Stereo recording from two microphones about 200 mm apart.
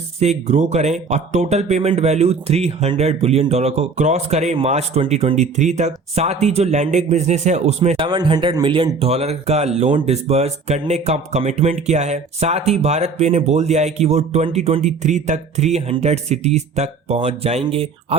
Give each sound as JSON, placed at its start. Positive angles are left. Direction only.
{"t": 0.2, "sound": "speech", "side_deg": -35}